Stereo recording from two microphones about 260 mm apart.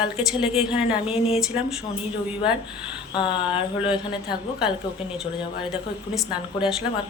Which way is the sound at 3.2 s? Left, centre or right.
Centre.